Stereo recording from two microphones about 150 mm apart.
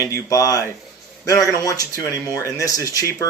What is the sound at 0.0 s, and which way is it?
A man's voice, 20° left (ahead or behind).